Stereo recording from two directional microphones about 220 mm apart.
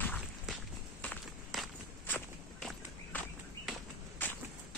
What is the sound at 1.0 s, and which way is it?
Walk, 5° left (ahead or behind).